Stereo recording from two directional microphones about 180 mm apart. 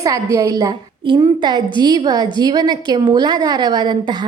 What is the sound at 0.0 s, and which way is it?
A woman's voice, 20° right (ahead or behind).